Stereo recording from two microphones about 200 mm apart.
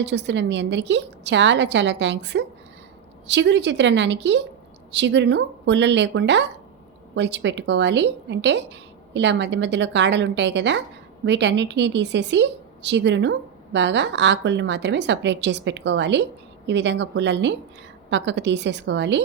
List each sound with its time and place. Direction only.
0.0 s a woman's voice: 60° right (ahead or behind)